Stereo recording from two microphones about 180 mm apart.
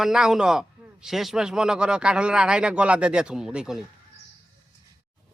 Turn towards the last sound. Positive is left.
turn(degrees=-5)  # may be behind; listen again after turning